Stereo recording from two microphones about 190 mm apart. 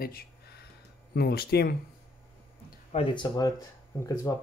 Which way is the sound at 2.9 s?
25° left (ahead or behind).